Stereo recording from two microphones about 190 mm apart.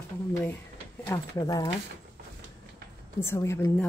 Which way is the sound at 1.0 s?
15° left (ahead or behind).